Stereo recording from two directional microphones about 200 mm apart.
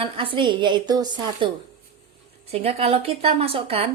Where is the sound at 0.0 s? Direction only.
25° right (ahead or behind).